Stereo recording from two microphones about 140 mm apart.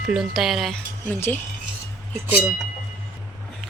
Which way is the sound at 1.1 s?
15° left (ahead or behind).